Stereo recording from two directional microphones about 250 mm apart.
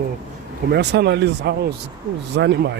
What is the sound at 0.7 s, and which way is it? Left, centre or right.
Speech, right.